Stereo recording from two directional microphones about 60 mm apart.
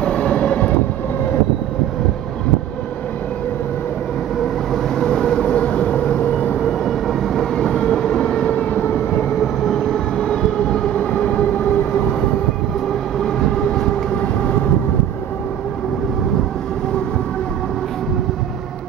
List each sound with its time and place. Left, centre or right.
0.0 s train: centre
4.7 s train: centre
6.6 s train: centre; by 9.3 s left
9.4 s train: centre
13.2 s train: centre
14.1 s vehicle: left